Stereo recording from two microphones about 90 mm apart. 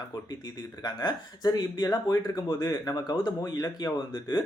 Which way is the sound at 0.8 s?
50° left (ahead or behind).